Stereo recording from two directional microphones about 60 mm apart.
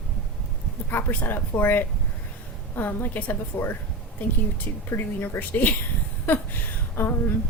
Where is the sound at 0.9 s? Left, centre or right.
Left.